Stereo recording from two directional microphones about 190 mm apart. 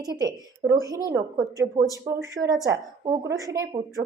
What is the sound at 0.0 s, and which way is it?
A woman's voice, 20° right (ahead or behind).